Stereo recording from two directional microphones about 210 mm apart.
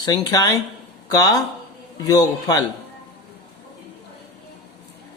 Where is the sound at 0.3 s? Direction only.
15° left (ahead or behind).